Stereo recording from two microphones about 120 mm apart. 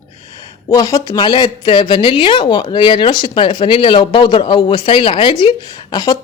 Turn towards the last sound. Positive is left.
turn(degrees=40)  # may be behind; listen again after turning